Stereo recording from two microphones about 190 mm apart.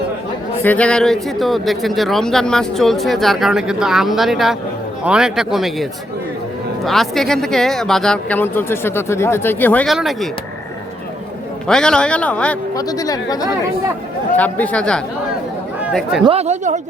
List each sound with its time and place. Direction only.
0.6 s a man's voice: 5° left (ahead or behind)
11.7 s a man's voice: 5° left (ahead or behind)
12.7 s speech: 20° left (ahead or behind)
14.3 s speech: 10° left (ahead or behind)
16.2 s speech: 30° right (ahead or behind)